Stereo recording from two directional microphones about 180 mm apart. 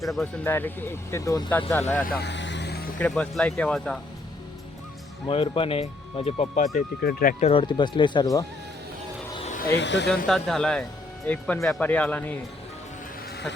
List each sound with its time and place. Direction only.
0.0 s speech: centre (ahead or behind)
0.4 s speech: 10° left (ahead or behind)
2.0 s vehicle: 65° left (ahead or behind)
3.0 s speech: 5° left (ahead or behind)
5.3 s speech: 30° left (ahead or behind)
7.0 s speech: 60° left (ahead or behind)
7.3 s speech: 35° left (ahead or behind)
9.7 s speech: 75° left (ahead or behind)
10.2 s speech: centre (ahead or behind)